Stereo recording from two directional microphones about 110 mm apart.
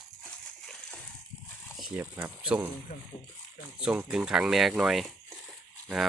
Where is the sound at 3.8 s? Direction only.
10° right (ahead or behind).